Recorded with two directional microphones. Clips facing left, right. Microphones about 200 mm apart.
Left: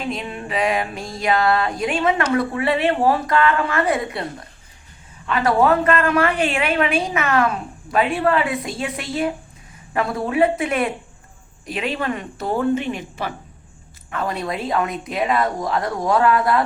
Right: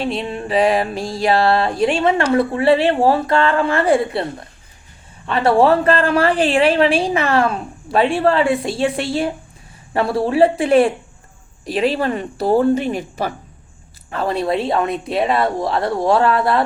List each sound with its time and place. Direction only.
0.0 s a woman's voice: 30° right (ahead or behind)